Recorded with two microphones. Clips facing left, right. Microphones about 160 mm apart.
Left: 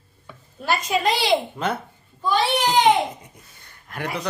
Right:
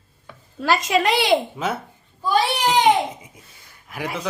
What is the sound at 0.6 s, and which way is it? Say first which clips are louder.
Speech: right 3 dB; 90° right.